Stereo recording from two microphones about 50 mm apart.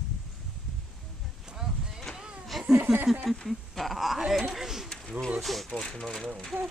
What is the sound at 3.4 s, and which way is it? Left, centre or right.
Speech, centre.